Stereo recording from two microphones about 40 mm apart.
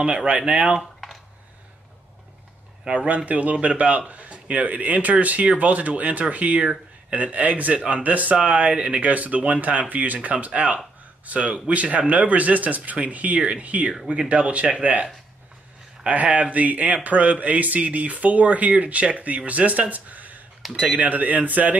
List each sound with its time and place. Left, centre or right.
0.0 s speech: right
2.8 s speech: right
8.5 s speech: right
9.0 s speech: right
16.3 s speech: right